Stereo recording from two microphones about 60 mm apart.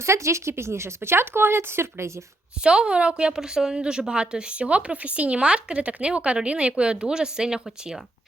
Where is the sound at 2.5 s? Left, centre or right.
Centre.